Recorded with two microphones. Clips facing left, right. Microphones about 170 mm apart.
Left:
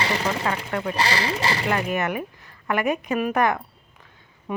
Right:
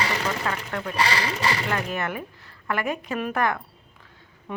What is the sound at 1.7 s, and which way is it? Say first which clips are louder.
A woman's voice: left 4 dB; 15° left (ahead or behind).